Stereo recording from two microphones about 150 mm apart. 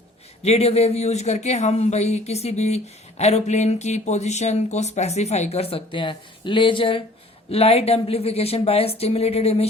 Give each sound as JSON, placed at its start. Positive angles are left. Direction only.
{"t": 0.4, "sound": "speech", "side_deg": 45}